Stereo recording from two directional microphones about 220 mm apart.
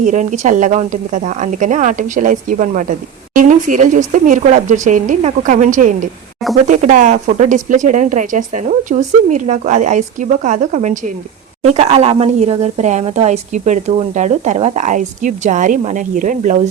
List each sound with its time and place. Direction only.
0.0 s speech: 35° right (ahead or behind)